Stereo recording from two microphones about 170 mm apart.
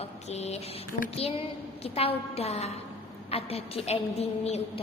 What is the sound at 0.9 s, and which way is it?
Child singing, 55° left (ahead or behind).